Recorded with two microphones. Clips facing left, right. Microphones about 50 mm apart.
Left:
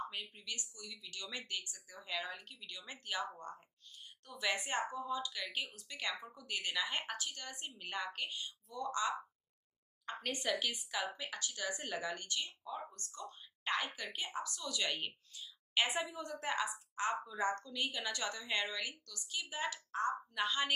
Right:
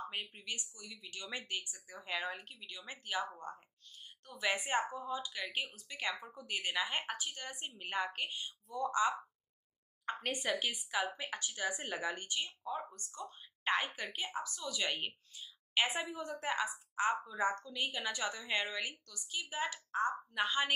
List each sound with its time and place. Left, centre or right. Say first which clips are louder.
0.1 s speech: right 3 dB; right
0.7 s speech: even; centre
1.0 s speech: right 3 dB; right
14.1 s speech: right 1 dB; centre
15.7 s speech: right 1 dB; centre
18.7 s speech: right 2 dB; centre